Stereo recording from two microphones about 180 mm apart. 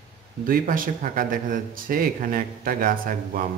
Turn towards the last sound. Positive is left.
turn(degrees=-50)  # may be behind; listen again after turning